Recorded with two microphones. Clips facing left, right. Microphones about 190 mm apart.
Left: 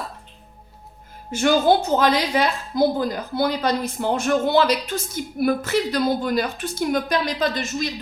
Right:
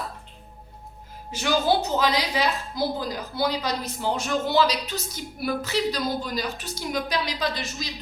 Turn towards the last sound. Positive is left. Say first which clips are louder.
# left 6 dB
turn(degrees=50)  # may be behind; listen again after turning